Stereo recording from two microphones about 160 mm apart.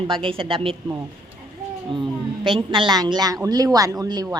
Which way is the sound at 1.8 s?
30° right (ahead or behind).